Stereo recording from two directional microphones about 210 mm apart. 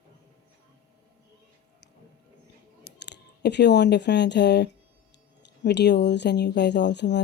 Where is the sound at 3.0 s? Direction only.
55° left (ahead or behind).